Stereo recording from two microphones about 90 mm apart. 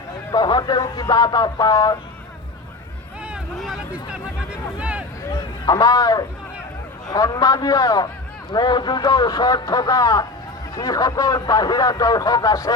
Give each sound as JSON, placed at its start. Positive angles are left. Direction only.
{"t": 0.3, "sound": "speech", "side_deg": 55}
{"t": 3.5, "sound": "speech", "side_deg": 0}
{"t": 3.9, "sound": "speech", "side_deg": -10}
{"t": 5.3, "sound": "speech", "side_deg": 45}
{"t": 8.5, "sound": "speech", "side_deg": 55}